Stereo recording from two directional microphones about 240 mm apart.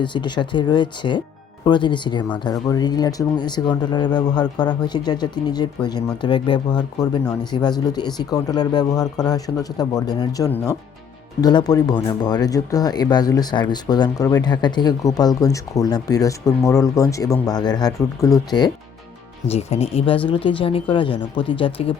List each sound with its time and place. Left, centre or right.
0.0 s speech: centre